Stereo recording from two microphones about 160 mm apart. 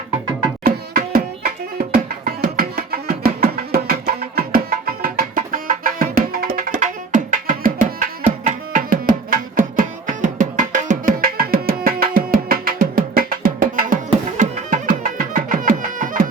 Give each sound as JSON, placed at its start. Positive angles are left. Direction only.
{"t": 0.6, "sound": "music", "side_deg": -65}
{"t": 8.4, "sound": "tabla", "side_deg": -55}